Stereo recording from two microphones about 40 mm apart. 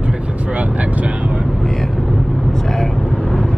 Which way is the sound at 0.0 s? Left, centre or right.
Right.